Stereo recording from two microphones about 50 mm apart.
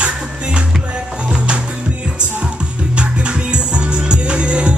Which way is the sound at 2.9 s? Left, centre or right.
Right.